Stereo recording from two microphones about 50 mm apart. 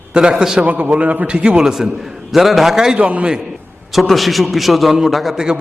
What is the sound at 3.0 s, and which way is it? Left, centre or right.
Speech, right.